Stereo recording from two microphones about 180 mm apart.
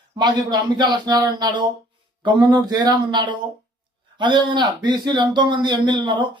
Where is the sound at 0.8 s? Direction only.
25° right (ahead or behind).